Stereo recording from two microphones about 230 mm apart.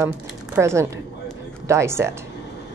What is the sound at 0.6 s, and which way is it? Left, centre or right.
Speech, centre.